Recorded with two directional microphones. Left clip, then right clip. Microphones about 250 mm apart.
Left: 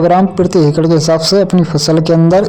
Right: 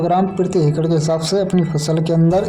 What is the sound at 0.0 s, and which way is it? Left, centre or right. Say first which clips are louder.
Speech: left 7 dB; left.